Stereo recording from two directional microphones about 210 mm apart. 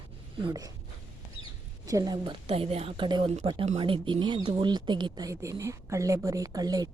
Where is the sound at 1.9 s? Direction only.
15° right (ahead or behind).